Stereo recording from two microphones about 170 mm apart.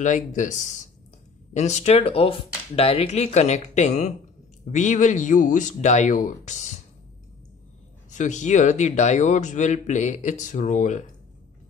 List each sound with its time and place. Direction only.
0.0 s speech: 45° left (ahead or behind)
8.1 s speech: 45° left (ahead or behind)